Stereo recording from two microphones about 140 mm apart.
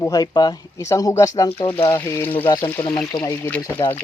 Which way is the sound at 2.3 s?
35° left (ahead or behind).